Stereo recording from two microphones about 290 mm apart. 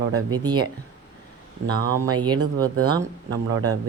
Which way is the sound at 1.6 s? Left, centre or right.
Centre.